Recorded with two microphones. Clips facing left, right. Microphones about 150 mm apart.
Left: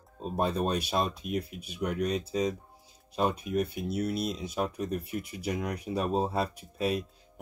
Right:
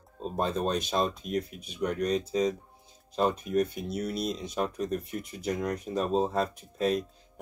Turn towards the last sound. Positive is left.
turn(degrees=5)  # may be behind; listen again after turning